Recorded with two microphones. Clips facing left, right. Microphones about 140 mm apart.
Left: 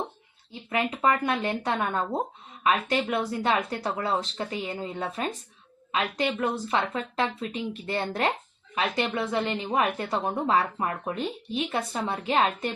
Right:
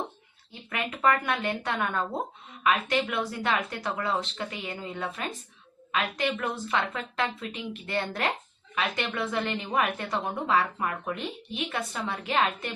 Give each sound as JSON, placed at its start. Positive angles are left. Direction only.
{"t": 0.7, "sound": "a woman's voice", "side_deg": 25}